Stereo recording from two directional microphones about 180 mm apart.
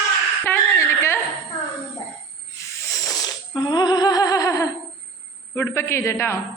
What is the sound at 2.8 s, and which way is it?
Music, 20° left (ahead or behind).